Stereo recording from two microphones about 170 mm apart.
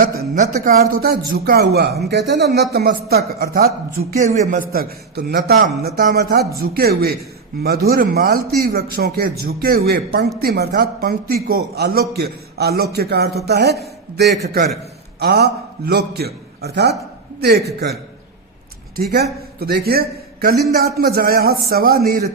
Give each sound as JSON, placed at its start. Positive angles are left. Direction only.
{"t": 0.2, "sound": "a man's voice", "side_deg": -50}
{"t": 2.0, "sound": "a man's voice", "side_deg": -90}
{"t": 4.2, "sound": "a man's voice", "side_deg": -45}
{"t": 4.7, "sound": "a man's voice", "side_deg": -65}
{"t": 19.1, "sound": "a man's voice", "side_deg": -70}